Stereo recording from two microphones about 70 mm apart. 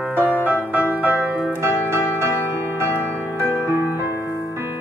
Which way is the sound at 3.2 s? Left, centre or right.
Left.